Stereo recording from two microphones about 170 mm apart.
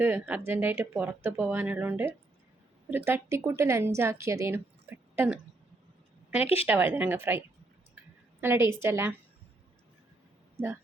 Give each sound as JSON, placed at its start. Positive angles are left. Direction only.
{"t": 0.0, "sound": "a woman's voice", "side_deg": -10}
{"t": 6.7, "sound": "speech", "side_deg": -15}